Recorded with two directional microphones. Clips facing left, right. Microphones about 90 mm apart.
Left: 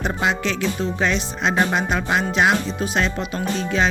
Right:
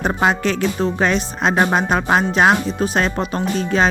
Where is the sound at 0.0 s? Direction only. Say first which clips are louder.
Right 4 dB; 45° right (ahead or behind).